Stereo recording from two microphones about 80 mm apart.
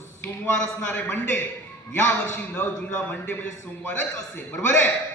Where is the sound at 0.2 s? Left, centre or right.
Left.